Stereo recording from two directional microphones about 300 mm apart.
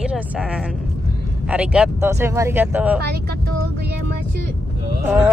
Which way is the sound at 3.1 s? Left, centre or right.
Right.